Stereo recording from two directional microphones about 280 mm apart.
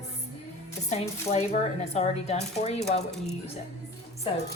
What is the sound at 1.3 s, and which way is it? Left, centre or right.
A woman's voice, left.